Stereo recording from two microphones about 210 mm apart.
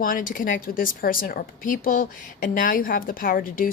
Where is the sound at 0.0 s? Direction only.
40° left (ahead or behind).